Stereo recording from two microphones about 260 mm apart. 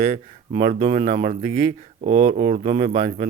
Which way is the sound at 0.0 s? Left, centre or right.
Right.